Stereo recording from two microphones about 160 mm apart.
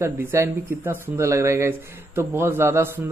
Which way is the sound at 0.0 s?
15° right (ahead or behind).